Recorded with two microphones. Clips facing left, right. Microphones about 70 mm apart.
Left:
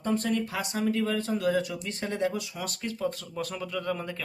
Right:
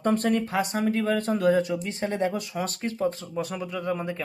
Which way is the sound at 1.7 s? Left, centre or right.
Right.